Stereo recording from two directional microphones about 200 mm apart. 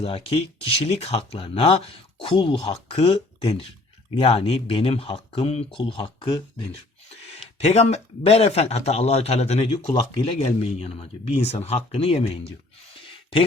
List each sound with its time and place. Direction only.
0.0 s speech: 30° left (ahead or behind)
7.6 s speech: 35° left (ahead or behind)